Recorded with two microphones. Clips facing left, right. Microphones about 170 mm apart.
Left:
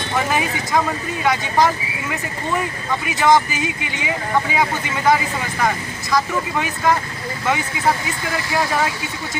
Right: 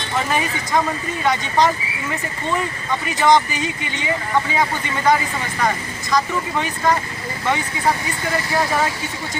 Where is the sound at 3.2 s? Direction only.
5° left (ahead or behind).